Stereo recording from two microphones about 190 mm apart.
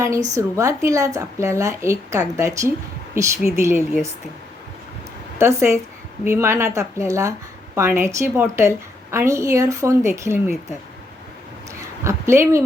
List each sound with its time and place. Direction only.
0.3 s a woman's voice: 15° right (ahead or behind)
5.4 s a woman's voice: 15° right (ahead or behind)
12.0 s a woman's voice: 15° right (ahead or behind)